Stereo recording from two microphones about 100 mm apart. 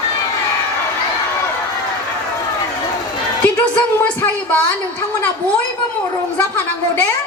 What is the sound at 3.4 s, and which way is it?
A woman's voice, 15° left (ahead or behind).